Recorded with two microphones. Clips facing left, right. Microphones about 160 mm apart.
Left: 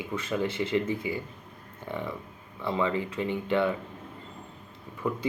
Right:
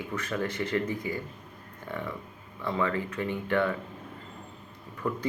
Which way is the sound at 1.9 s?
15° left (ahead or behind).